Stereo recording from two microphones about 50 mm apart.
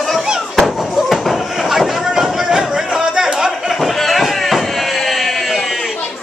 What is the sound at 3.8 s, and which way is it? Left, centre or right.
Sheep, centre.